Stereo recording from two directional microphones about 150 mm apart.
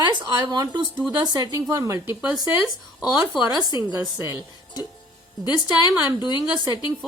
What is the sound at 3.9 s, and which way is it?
Speech, 20° right (ahead or behind).